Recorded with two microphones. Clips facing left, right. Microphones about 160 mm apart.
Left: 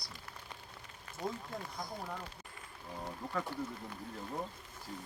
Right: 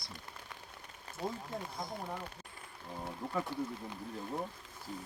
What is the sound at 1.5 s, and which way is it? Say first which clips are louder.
Speech: right 2 dB; 20° right (ahead or behind).